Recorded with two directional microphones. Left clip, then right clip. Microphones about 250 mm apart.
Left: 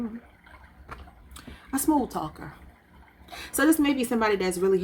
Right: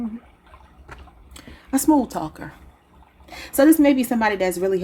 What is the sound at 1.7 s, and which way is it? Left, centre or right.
Speech, right.